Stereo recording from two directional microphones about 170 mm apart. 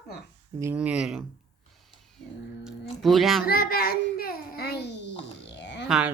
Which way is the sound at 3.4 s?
65° left (ahead or behind).